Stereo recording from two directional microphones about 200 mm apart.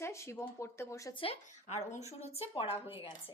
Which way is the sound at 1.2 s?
30° left (ahead or behind).